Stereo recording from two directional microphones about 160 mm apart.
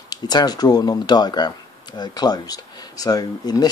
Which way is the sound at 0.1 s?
25° left (ahead or behind).